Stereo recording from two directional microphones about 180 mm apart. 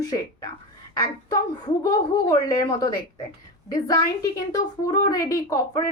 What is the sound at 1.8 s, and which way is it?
A woman's voice, 20° left (ahead or behind).